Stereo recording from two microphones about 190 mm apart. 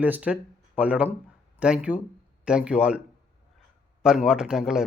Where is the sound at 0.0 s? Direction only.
5° right (ahead or behind).